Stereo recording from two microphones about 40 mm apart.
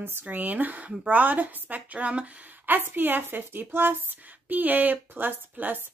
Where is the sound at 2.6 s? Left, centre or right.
Right.